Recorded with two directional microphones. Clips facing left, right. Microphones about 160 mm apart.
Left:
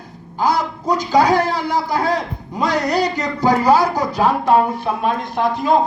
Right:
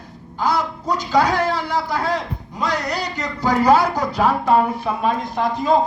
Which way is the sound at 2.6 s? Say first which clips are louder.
Left 5 dB; 35° left (ahead or behind).